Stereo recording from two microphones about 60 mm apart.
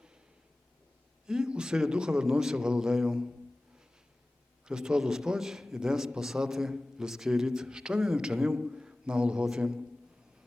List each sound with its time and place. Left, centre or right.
1.3 s a man's voice: centre
4.6 s a man's voice: centre
8.6 s a man's voice: centre